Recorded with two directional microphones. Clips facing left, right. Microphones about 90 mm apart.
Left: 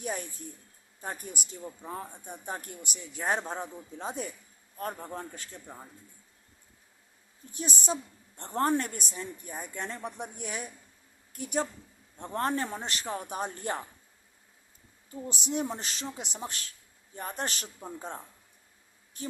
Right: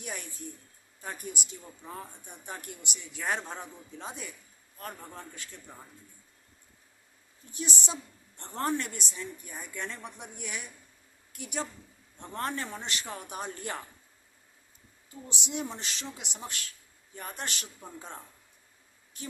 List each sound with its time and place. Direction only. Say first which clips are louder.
0.0 s speech: left 5 dB; 35° left (ahead or behind)
1.8 s speech: left 2 dB; 25° left (ahead or behind)
2.2 s speech: left 4 dB; 35° left (ahead or behind)
5.6 s speech: left 3 dB; 15° left (ahead or behind)
7.5 s speech: left 3 dB; 40° left (ahead or behind)
15.1 s speech: left 4 dB; 40° left (ahead or behind)
19.2 s a sound: left 4 dB; 35° left (ahead or behind)